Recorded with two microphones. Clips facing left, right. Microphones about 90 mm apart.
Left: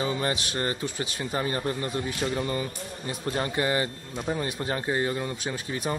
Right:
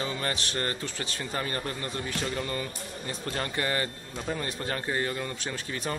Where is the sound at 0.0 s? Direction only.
15° left (ahead or behind).